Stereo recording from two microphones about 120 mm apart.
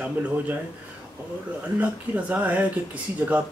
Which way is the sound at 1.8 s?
10° right (ahead or behind).